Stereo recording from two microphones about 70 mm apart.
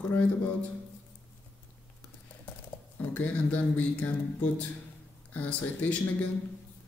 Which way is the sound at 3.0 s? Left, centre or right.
Left.